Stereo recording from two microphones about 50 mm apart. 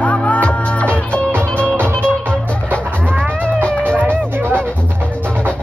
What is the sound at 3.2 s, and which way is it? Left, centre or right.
Music, right.